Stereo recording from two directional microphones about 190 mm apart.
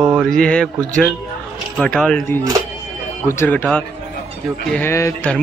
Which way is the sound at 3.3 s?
10° left (ahead or behind).